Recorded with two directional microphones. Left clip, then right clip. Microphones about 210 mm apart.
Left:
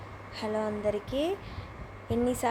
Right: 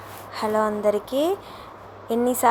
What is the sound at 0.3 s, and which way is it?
A woman's voice, 10° right (ahead or behind).